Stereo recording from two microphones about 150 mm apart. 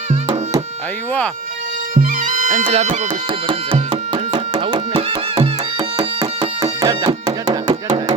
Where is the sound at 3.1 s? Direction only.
35° right (ahead or behind).